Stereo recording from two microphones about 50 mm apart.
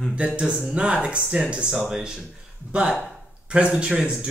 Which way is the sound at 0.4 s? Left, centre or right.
Centre.